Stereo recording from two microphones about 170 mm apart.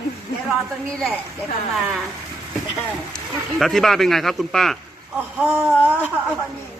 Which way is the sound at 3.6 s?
Centre (ahead or behind).